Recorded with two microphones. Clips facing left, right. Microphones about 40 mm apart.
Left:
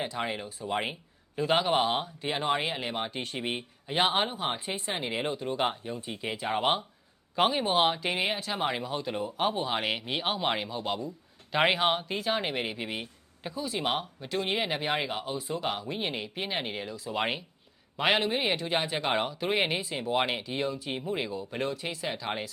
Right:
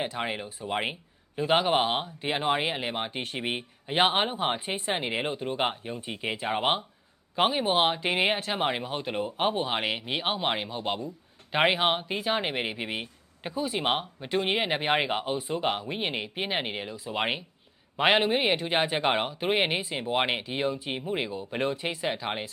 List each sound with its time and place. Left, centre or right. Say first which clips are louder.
0.0 s speech: right 1 dB; centre
8.2 s speech: right 6 dB; right
9.8 s speech: right 1 dB; centre
10.2 s speech: right 1 dB; right